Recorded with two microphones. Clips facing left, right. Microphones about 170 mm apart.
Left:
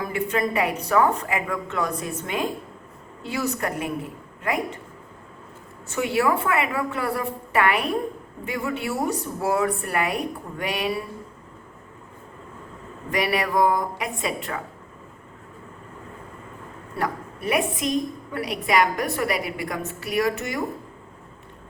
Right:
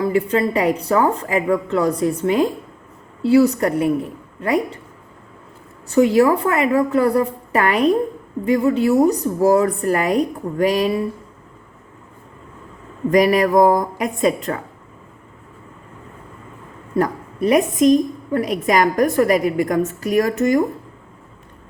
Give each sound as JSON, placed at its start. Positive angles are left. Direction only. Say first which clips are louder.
{"t": 0.0, "sound": "a woman's voice", "louder": "right 7 dB", "side_deg": -30}
{"t": 5.9, "sound": "a woman's voice", "louder": "right 9 dB", "side_deg": -35}
{"t": 13.1, "sound": "a woman's voice", "louder": "right 10 dB", "side_deg": -40}
{"t": 17.0, "sound": "a woman's voice", "louder": "right 9 dB", "side_deg": -40}